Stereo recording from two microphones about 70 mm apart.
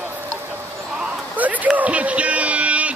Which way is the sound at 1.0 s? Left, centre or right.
Right.